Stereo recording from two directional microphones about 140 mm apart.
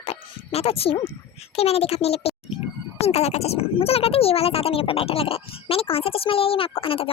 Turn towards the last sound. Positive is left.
turn(degrees=40)  # may be behind; listen again after turning